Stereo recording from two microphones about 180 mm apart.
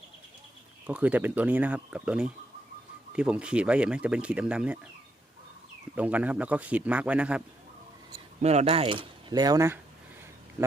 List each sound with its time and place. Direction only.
0.9 s speech: 10° right (ahead or behind)
5.9 s speech: 10° right (ahead or behind)
8.4 s speech: 35° right (ahead or behind); by 9.7 s 20° right (ahead or behind)